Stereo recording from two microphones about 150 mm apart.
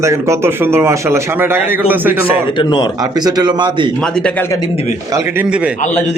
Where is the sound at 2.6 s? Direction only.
30° left (ahead or behind).